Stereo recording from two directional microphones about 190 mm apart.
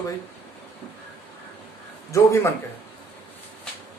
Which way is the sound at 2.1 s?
15° left (ahead or behind).